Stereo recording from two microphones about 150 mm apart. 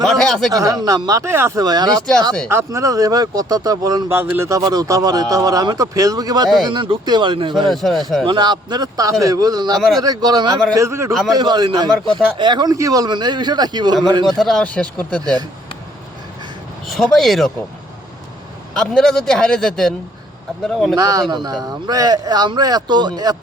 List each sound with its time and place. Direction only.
0.0 s speech: centre (ahead or behind)
0.5 s speech: 25° right (ahead or behind)
7.7 s a man's voice: centre (ahead or behind)
8.2 s speech: 30° right (ahead or behind)
9.7 s a man's voice: centre (ahead or behind)
10.0 s speech: 25° right (ahead or behind)
14.3 s a man's voice: centre (ahead or behind)
15.2 s speech: 25° right (ahead or behind)
16.8 s a man's voice: centre (ahead or behind)
18.7 s a man's voice: 5° left (ahead or behind)
20.9 s speech: 25° right (ahead or behind)